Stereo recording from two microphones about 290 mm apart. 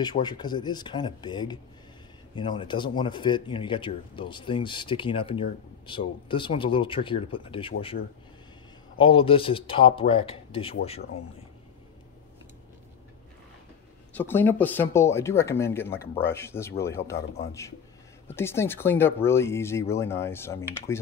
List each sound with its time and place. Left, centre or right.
0.0 s speech: centre
14.1 s speech: centre
18.3 s speech: centre